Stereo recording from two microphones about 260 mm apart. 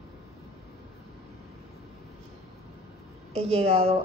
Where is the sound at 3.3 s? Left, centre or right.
Right.